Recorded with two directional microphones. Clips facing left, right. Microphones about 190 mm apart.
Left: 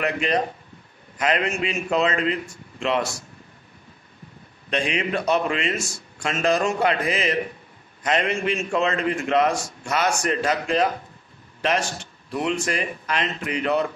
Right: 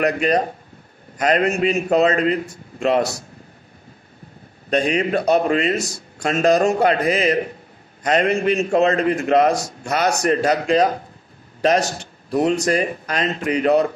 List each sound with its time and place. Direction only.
0.0 s a man's voice: 40° right (ahead or behind)
4.6 s a man's voice: 40° right (ahead or behind)